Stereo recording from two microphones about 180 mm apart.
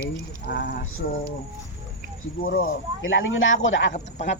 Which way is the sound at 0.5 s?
55° left (ahead or behind).